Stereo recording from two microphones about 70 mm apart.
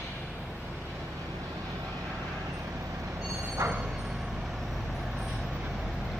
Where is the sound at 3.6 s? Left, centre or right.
Right.